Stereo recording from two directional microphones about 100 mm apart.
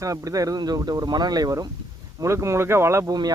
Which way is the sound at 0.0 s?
35° right (ahead or behind).